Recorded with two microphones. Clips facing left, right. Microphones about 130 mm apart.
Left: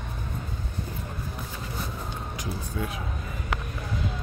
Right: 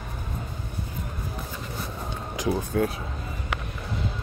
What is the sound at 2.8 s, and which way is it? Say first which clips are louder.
Speech: right 7 dB; 55° right (ahead or behind).